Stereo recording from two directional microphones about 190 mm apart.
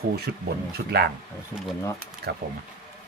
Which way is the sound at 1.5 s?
20° right (ahead or behind).